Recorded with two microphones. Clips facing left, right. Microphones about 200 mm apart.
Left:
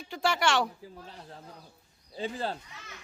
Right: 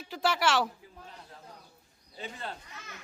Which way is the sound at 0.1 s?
Centre (ahead or behind).